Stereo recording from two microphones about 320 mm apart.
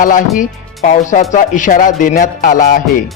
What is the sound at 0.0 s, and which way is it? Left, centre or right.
Speech, left.